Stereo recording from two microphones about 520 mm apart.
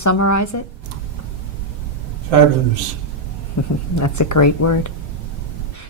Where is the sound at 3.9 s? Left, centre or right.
Left.